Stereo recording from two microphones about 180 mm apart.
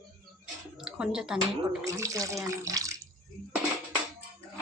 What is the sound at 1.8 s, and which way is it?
Speech, 15° right (ahead or behind).